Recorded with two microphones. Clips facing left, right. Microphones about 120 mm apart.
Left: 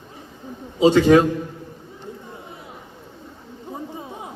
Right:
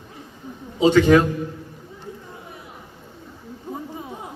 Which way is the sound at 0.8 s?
30° left (ahead or behind).